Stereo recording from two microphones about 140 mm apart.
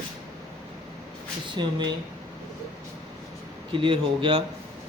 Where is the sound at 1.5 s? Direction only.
35° right (ahead or behind).